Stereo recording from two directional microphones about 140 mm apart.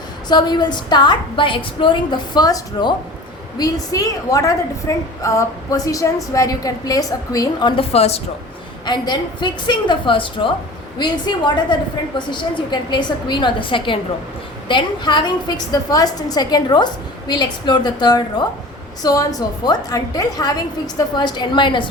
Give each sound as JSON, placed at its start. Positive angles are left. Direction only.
{"t": 0.3, "sound": "a woman's voice", "side_deg": 30}
{"t": 7.8, "sound": "a woman's voice", "side_deg": 45}
{"t": 8.9, "sound": "a woman's voice", "side_deg": 30}